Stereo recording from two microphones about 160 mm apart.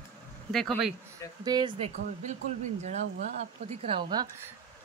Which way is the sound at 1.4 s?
25° right (ahead or behind).